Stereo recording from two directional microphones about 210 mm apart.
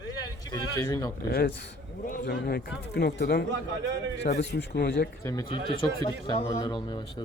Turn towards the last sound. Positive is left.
turn(degrees=20)  # may be behind; listen again after turning